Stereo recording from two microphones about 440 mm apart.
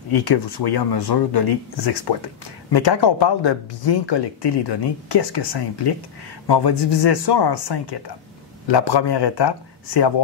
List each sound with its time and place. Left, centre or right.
0.1 s speech: left